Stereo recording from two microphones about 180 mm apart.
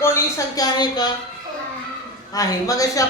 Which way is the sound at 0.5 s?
20° left (ahead or behind).